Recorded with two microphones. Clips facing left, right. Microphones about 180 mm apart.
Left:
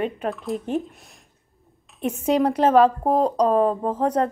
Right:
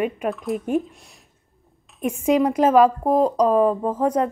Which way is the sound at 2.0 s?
10° right (ahead or behind).